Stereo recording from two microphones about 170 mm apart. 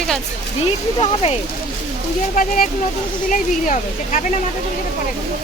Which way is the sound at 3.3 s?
50° left (ahead or behind).